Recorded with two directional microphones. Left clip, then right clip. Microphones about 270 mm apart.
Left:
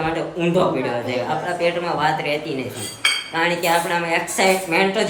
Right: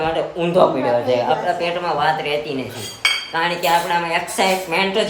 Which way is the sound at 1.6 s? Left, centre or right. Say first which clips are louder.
Right 1 dB; centre.